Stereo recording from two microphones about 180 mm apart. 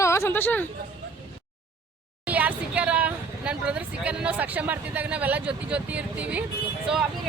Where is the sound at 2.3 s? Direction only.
10° right (ahead or behind).